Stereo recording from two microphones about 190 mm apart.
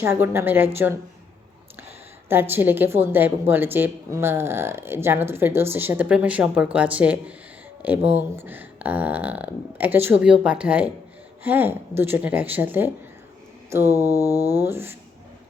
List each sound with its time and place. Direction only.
0.0 s a woman's voice: 10° right (ahead or behind)
2.3 s a woman's voice: 10° right (ahead or behind)